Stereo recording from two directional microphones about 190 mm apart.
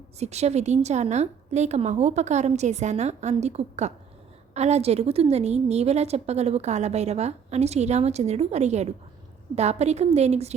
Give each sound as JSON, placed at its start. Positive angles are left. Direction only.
{"t": 0.2, "sound": "a woman's voice", "side_deg": -35}